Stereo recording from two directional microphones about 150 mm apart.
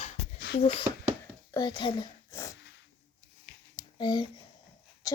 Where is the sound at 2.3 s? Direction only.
20° left (ahead or behind).